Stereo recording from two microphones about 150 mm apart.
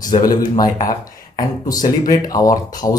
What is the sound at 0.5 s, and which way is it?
Speech, 25° left (ahead or behind).